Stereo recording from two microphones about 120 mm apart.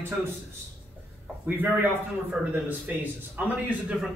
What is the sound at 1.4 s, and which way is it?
A man's voice, 15° right (ahead or behind).